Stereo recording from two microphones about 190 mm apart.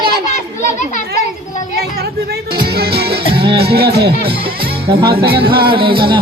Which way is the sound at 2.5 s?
55° right (ahead or behind).